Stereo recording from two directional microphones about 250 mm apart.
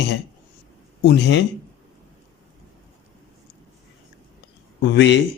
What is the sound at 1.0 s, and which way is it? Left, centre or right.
Speech, left.